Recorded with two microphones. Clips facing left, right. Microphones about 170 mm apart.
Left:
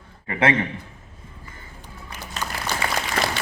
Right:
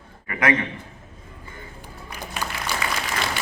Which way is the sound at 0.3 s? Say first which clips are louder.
Left 2 dB; 25° left (ahead or behind).